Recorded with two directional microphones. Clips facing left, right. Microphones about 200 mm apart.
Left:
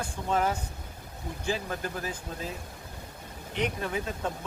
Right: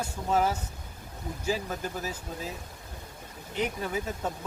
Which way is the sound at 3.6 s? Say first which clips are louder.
Even; 5° right (ahead or behind).